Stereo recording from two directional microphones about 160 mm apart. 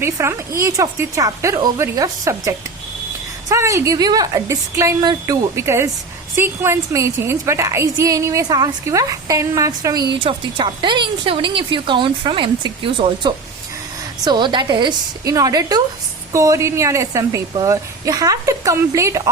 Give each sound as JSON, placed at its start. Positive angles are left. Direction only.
{"t": 0.0, "sound": "a woman's voice", "side_deg": -15}